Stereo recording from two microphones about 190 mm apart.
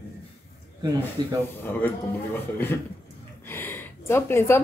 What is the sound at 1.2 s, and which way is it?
Speech, 25° right (ahead or behind).